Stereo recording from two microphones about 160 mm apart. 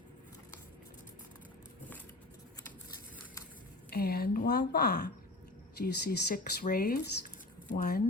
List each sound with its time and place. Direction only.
3.8 s speech: 75° left (ahead or behind); by 5.1 s 90° left
5.8 s speech: 65° left (ahead or behind)